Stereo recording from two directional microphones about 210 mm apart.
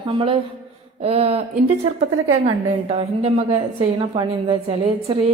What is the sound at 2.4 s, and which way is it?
A woman's voice, 30° right (ahead or behind).